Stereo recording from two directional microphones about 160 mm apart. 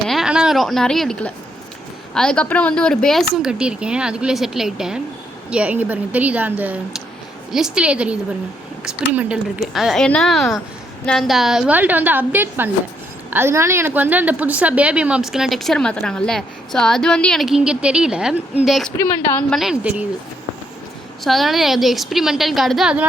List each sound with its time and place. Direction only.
0.1 s a woman's voice: 5° right (ahead or behind)
21.2 s a woman's voice: centre (ahead or behind)